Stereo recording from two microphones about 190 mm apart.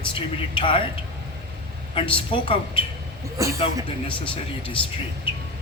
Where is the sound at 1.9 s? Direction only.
30° left (ahead or behind).